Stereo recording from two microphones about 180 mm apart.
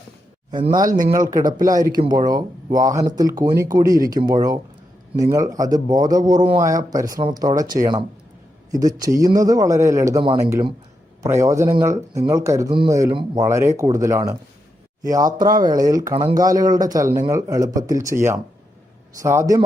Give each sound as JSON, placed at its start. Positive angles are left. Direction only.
{"t": 0.5, "sound": "a man's voice", "side_deg": -25}
{"t": 0.8, "sound": "speech", "side_deg": -50}
{"t": 1.3, "sound": "a man's voice", "side_deg": -20}